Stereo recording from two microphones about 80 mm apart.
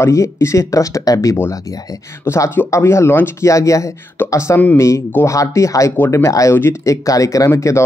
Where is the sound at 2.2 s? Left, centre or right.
Left.